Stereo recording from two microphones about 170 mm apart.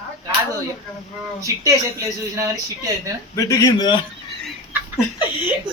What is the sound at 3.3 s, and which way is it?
Speech, 20° left (ahead or behind).